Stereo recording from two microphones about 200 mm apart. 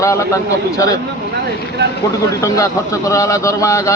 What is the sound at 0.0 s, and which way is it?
Speech, 15° left (ahead or behind).